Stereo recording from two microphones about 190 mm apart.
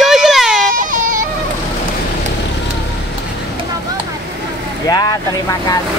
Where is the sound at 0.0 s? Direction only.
Centre (ahead or behind).